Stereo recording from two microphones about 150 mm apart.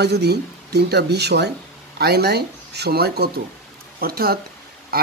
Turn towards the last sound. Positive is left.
turn(degrees=-90)